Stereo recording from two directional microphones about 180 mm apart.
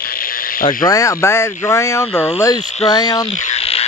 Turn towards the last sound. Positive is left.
turn(degrees=35)  # may be behind; listen again after turning